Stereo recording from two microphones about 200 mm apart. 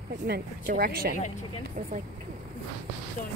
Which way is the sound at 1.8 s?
40° right (ahead or behind).